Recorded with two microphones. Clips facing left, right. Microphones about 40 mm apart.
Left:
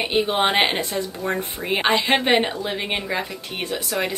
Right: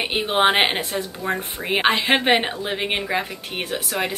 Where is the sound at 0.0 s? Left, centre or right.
Centre.